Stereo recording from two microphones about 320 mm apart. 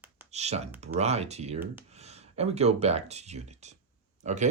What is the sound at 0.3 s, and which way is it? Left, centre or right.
Speech, centre.